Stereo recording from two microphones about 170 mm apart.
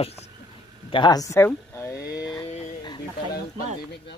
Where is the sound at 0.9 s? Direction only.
25° left (ahead or behind).